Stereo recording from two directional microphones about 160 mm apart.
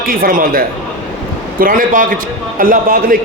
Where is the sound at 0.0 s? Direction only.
65° right (ahead or behind).